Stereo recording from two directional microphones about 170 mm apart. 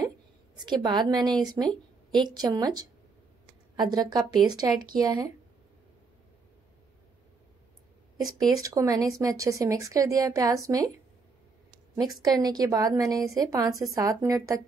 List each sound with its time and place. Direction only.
0.6 s speech: 25° right (ahead or behind)
8.5 s speech: 20° right (ahead or behind)
12.4 s speech: 20° right (ahead or behind)